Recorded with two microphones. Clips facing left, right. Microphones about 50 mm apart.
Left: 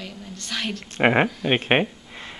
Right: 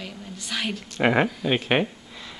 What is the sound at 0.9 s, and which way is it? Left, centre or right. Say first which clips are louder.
Speech: left 2 dB; left.